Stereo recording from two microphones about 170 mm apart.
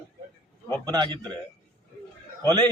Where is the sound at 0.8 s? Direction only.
25° right (ahead or behind).